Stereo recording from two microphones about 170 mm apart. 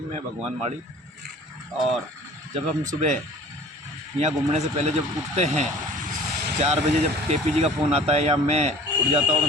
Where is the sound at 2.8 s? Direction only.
45° right (ahead or behind).